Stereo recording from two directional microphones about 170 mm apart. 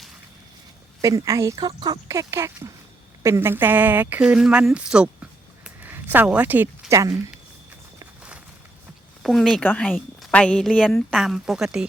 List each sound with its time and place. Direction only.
1.0 s speech: 20° right (ahead or behind)
9.2 s a woman's voice: centre (ahead or behind)